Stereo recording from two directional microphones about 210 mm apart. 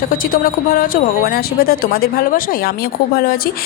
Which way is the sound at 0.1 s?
45° left (ahead or behind).